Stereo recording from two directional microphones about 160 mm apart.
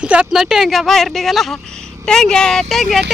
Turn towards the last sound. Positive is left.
turn(degrees=0)  # may be behind; listen again after turning